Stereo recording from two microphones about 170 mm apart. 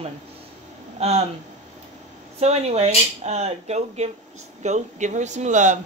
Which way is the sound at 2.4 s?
40° right (ahead or behind).